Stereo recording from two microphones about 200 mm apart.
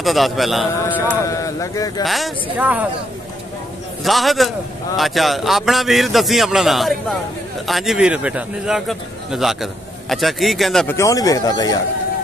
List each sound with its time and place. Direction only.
0.0 s a man's voice: centre (ahead or behind); by 2.0 s 15° left (ahead or behind)
2.0 s speech: centre (ahead or behind)
4.0 s speech: centre (ahead or behind)
11.0 s a man's voice: 15° left (ahead or behind)